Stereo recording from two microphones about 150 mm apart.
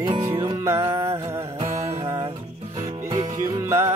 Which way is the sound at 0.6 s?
20° right (ahead or behind).